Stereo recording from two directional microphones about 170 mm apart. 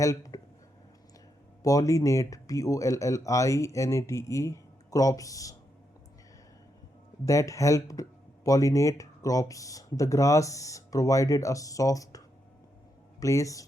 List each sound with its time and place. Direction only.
0.0 s speech: 20° left (ahead or behind)
1.6 s speech: 20° left (ahead or behind)
7.3 s speech: 20° left (ahead or behind)